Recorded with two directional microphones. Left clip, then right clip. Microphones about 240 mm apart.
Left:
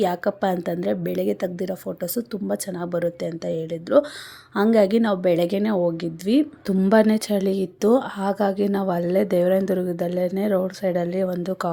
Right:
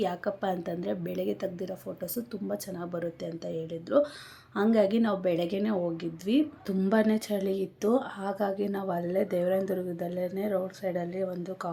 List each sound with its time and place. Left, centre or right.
0.0 s a woman's voice: left